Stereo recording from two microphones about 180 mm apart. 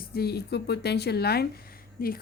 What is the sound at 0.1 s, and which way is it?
Speech, 60° left (ahead or behind).